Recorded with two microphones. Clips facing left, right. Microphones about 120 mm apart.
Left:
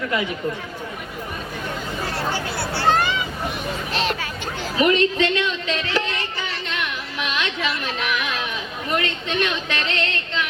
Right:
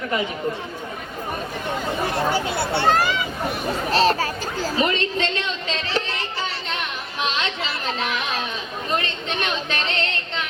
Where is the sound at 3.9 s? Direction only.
40° right (ahead or behind).